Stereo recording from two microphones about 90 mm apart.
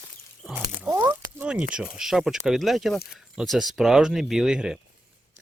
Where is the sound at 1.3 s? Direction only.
10° right (ahead or behind).